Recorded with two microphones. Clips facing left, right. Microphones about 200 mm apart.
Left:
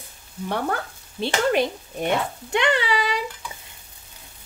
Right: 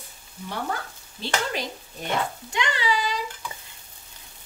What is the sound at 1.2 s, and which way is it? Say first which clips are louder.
Speech: left 8 dB; 60° left (ahead or behind).